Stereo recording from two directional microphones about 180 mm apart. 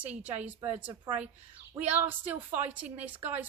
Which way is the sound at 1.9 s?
10° right (ahead or behind).